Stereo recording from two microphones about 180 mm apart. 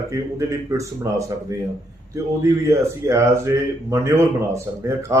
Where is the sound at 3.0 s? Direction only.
15° right (ahead or behind).